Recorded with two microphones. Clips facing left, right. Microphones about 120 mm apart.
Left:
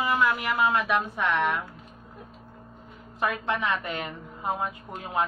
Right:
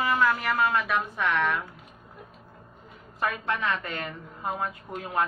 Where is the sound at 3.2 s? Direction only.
20° left (ahead or behind).